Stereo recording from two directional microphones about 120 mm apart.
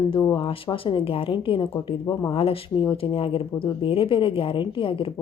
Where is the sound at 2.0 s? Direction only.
30° left (ahead or behind).